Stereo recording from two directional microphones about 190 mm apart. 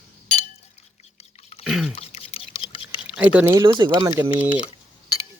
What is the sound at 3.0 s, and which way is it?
Speech, 10° right (ahead or behind).